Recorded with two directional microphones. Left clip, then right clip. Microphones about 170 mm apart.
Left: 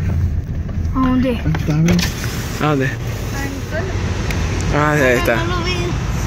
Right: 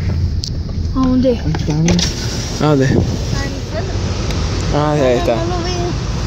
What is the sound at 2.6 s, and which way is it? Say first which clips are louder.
Speech: right 3 dB; 25° right (ahead or behind).